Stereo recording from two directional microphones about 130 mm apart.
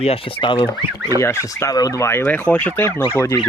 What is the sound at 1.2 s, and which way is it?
Speech, 20° left (ahead or behind).